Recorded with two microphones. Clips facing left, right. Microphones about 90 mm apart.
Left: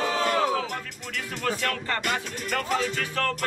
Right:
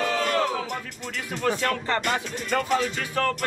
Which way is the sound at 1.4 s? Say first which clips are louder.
Right 4 dB; 20° right (ahead or behind).